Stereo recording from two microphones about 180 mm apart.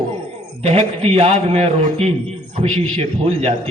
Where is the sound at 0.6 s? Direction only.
35° right (ahead or behind).